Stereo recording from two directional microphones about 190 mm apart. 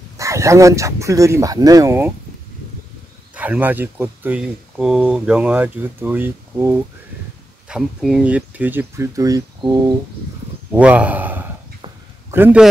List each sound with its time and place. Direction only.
0.2 s speech: 15° right (ahead or behind)
3.3 s speech: 10° right (ahead or behind)
10.7 s a man's voice: 5° right (ahead or behind)